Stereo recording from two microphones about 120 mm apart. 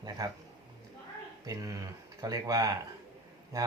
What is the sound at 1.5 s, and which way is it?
Speech, 30° right (ahead or behind).